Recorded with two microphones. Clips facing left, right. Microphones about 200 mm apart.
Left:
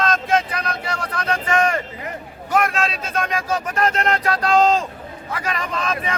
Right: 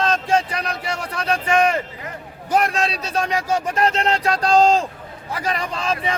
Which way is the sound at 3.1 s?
25° right (ahead or behind).